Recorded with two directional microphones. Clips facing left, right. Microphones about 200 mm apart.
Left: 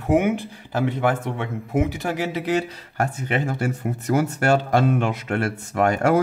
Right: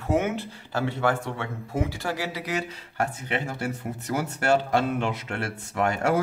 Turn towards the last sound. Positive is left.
turn(degrees=55)  # may be behind; listen again after turning